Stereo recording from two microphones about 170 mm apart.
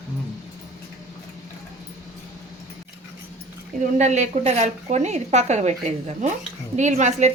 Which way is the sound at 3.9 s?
40° right (ahead or behind).